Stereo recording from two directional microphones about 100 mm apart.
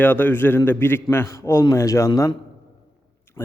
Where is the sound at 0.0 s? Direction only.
20° left (ahead or behind).